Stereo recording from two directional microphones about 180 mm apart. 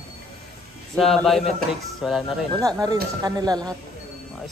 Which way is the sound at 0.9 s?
Centre (ahead or behind).